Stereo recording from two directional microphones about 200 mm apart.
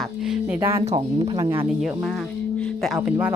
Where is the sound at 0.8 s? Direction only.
30° right (ahead or behind).